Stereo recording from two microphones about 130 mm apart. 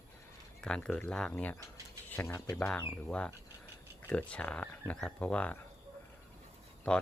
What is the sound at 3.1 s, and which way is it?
Speech, 10° left (ahead or behind).